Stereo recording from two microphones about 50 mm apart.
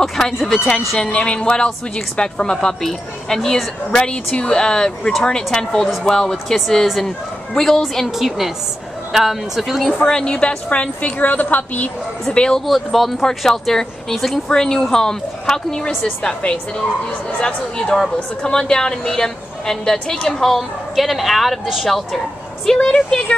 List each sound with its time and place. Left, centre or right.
0.0 s speech: centre
1.0 s a woman's voice: left; by 3.6 s centre
3.9 s a woman's voice: centre
9.1 s speech: centre
10.0 s a woman's voice: centre; by 11.9 s left
12.3 s a woman's voice: centre
12.6 s a woman's voice: centre
22.7 s a woman's voice: centre